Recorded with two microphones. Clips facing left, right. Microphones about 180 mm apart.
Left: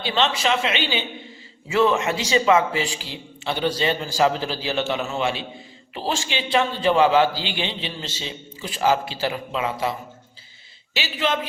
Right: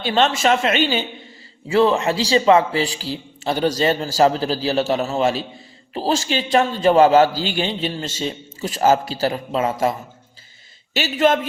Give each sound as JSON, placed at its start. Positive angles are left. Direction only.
{"t": 0.0, "sound": "a man's voice", "side_deg": -50}
{"t": 1.7, "sound": "a man's voice", "side_deg": -35}
{"t": 10.9, "sound": "a man's voice", "side_deg": -45}